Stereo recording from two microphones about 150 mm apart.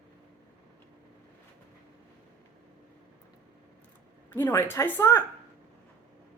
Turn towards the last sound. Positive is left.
turn(degrees=20)  # may be behind; listen again after turning